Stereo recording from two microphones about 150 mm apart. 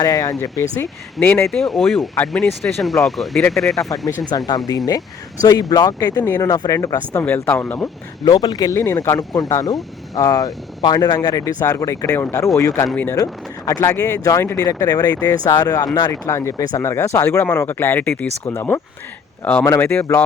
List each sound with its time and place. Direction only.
0.0 s speech: 25° left (ahead or behind)
1.5 s speech: centre (ahead or behind)
4.3 s speech: 25° left (ahead or behind); by 7.9 s 10° left (ahead or behind)
8.2 s speech: 25° left (ahead or behind)